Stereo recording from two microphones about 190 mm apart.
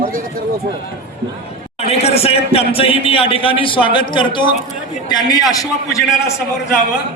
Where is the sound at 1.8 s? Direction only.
30° left (ahead or behind).